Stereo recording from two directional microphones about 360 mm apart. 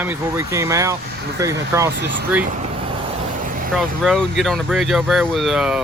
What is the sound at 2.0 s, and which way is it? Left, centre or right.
Speech, right.